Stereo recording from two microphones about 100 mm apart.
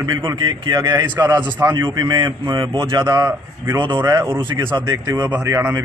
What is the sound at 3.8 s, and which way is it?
A man's voice, 45° right (ahead or behind).